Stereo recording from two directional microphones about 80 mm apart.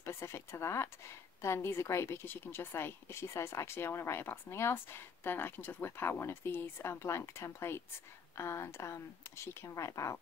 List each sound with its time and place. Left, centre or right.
0.0 s speech: left
2.2 s speech: left